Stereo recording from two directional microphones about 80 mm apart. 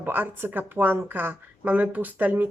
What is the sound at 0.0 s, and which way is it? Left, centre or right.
A woman's voice, right.